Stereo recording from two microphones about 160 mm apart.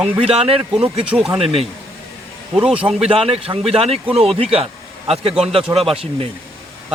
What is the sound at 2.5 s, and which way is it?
Speech, 5° right (ahead or behind).